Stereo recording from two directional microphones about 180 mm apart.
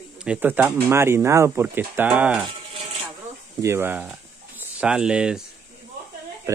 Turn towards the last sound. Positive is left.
turn(degrees=-15)  # may be behind; listen again after turning